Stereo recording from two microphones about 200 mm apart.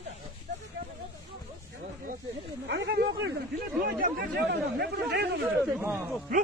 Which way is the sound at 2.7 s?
60° right (ahead or behind).